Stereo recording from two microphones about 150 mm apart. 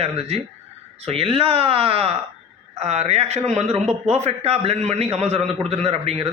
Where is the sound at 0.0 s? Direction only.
45° right (ahead or behind).